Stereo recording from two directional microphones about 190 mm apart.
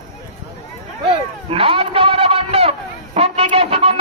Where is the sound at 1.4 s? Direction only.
30° right (ahead or behind).